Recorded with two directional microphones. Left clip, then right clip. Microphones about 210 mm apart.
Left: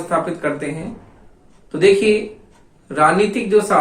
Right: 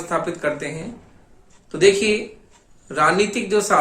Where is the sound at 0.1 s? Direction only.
50° right (ahead or behind).